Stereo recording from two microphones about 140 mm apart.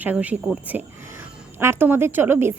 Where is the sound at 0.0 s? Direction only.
10° right (ahead or behind).